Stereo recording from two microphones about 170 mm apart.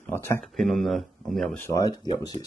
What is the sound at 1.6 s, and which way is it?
Speech, 20° left (ahead or behind).